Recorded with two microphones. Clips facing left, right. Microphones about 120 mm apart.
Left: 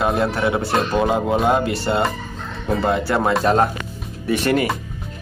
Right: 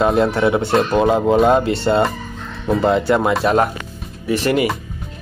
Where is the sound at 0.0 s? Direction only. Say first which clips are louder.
Right 4 dB; 25° right (ahead or behind).